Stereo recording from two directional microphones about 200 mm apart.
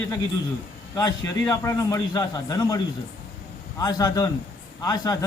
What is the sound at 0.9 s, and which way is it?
A man's voice, 20° left (ahead or behind).